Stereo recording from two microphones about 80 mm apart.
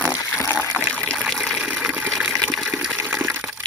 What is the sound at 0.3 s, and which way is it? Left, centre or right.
Water, left.